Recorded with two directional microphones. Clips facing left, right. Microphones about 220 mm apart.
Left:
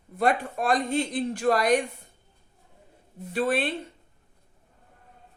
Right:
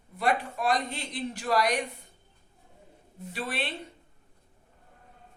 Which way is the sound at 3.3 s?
50° left (ahead or behind).